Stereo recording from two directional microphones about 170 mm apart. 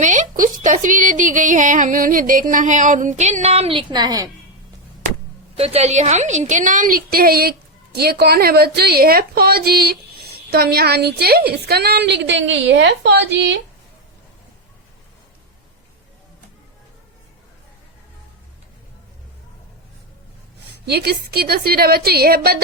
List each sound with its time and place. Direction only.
0.0 s speech: 45° right (ahead or behind); by 4.3 s 25° right (ahead or behind)
5.5 s a woman's voice: 35° right (ahead or behind); by 13.6 s 90° right
20.8 s a woman's voice: 70° right (ahead or behind)